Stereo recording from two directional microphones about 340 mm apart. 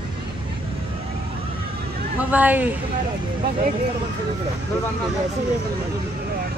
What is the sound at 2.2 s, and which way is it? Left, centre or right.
Speech, centre.